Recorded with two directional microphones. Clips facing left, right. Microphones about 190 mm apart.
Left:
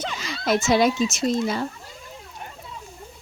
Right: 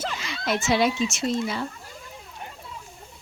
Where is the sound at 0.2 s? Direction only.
40° left (ahead or behind).